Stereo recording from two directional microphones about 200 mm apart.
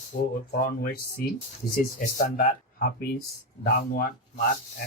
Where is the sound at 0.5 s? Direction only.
45° left (ahead or behind).